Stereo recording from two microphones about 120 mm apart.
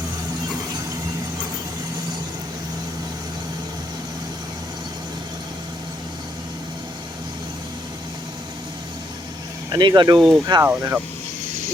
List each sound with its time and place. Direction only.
9.7 s speech: 40° right (ahead or behind)
10.2 s speech: centre (ahead or behind)
10.4 s speech: 30° right (ahead or behind)
10.7 s speech: 20° right (ahead or behind)